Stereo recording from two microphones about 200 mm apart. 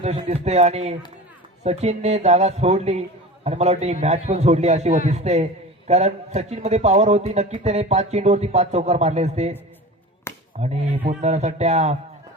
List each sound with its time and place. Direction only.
0.0 s a man's voice: 35° right (ahead or behind)
10.3 s a sound: 10° left (ahead or behind)
10.6 s a man's voice: 35° right (ahead or behind)